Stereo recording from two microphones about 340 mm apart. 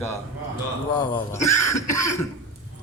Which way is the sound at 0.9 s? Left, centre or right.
Centre.